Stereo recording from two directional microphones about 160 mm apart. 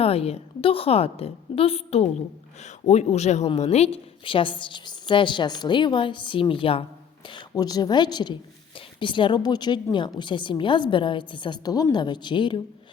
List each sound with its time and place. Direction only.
0.0 s a woman's voice: 40° left (ahead or behind)